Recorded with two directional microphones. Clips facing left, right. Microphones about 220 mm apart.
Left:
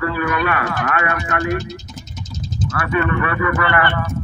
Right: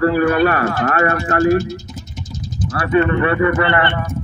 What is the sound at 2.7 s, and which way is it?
Speech, 35° right (ahead or behind).